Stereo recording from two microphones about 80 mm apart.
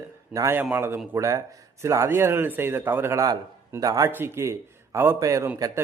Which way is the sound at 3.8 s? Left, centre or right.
Right.